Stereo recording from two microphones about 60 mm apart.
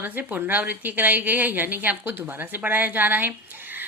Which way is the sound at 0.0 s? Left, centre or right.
Right.